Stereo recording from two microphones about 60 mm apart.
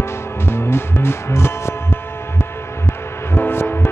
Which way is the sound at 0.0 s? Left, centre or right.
Left.